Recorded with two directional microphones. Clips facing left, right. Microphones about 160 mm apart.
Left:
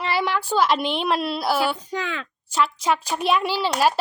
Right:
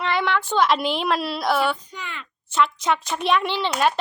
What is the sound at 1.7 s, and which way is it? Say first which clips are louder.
Speech: left 9 dB; 90° left.